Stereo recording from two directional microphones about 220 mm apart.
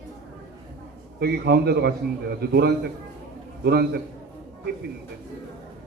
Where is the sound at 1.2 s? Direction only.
45° right (ahead or behind).